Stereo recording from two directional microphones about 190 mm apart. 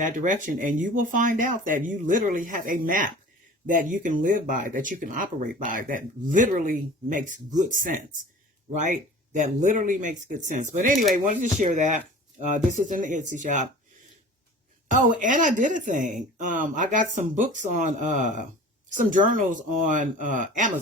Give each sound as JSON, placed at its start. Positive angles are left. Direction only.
{"t": 0.0, "sound": "speech", "side_deg": -40}
{"t": 14.8, "sound": "a woman's voice", "side_deg": -45}